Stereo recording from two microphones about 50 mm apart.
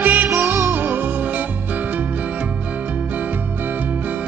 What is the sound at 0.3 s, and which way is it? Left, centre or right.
Music, right.